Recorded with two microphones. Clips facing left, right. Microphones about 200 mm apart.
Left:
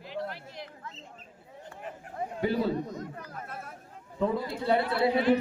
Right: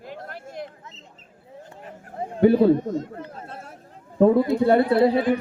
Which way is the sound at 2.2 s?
30° right (ahead or behind).